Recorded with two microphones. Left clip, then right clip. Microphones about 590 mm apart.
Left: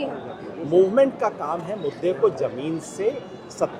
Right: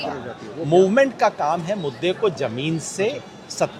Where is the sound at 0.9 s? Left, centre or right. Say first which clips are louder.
Right 2 dB; right.